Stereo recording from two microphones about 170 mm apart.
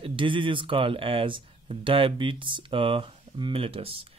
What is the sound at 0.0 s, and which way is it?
Speech, 30° right (ahead or behind).